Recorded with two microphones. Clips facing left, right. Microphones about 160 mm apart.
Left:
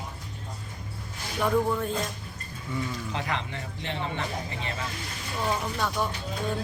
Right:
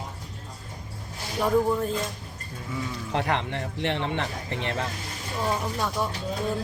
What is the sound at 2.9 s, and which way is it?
Speech, 65° right (ahead or behind).